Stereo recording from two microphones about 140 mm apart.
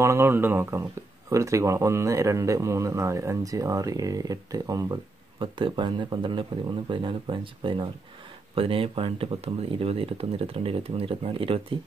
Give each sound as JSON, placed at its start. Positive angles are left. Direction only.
{"t": 0.0, "sound": "speech", "side_deg": -20}